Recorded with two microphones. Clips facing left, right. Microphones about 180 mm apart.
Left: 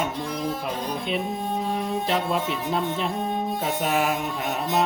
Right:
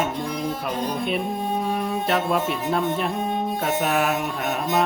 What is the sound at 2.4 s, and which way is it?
Music, 60° right (ahead or behind).